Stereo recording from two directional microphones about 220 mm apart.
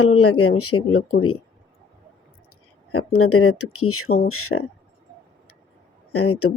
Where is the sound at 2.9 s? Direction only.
90° left.